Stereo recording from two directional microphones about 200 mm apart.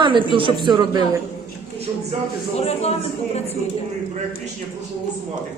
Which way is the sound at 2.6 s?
30° left (ahead or behind).